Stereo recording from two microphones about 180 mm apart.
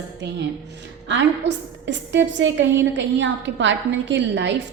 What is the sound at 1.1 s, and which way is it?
A woman's voice, 85° right.